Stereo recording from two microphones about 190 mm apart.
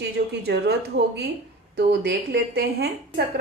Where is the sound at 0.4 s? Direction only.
60° right (ahead or behind).